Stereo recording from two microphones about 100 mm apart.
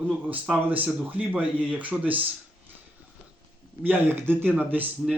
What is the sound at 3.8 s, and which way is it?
Speech, 20° right (ahead or behind).